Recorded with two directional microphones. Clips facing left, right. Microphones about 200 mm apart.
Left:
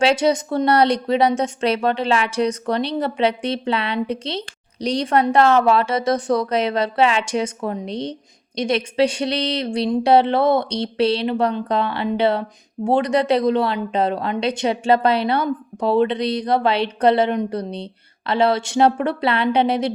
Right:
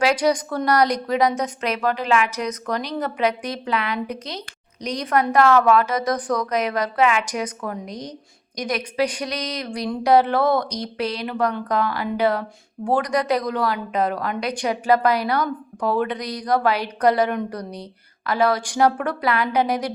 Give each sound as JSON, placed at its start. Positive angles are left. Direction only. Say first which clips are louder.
{"t": 0.0, "sound": "a woman's voice", "louder": "left 2 dB", "side_deg": 25}